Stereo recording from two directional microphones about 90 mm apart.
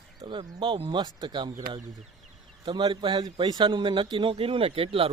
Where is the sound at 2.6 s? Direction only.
55° right (ahead or behind).